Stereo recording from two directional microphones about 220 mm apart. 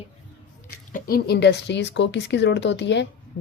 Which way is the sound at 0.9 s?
45° left (ahead or behind).